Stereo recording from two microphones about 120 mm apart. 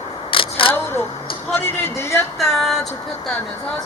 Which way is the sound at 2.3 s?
Centre (ahead or behind).